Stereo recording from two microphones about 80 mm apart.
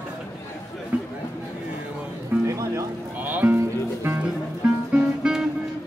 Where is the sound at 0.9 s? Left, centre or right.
Centre.